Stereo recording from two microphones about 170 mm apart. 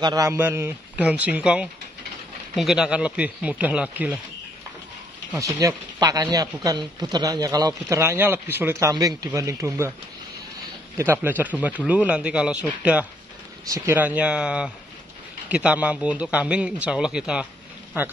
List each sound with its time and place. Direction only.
0.0 s a man's voice: 20° right (ahead or behind)
5.6 s a man's voice: 20° right (ahead or behind)
11.0 s a man's voice: 15° right (ahead or behind)
13.7 s a man's voice: 15° right (ahead or behind)